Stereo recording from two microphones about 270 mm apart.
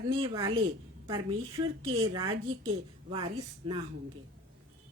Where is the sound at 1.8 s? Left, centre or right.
Centre.